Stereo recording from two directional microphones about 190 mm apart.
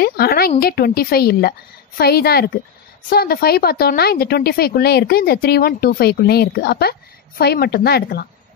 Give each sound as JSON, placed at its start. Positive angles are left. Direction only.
{"t": 0.0, "sound": "a woman's voice", "side_deg": 55}